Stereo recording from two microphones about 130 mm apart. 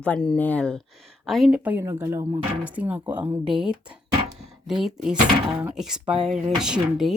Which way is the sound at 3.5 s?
5° right (ahead or behind).